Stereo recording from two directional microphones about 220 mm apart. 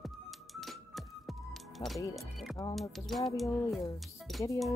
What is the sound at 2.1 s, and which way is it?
Speech, centre (ahead or behind).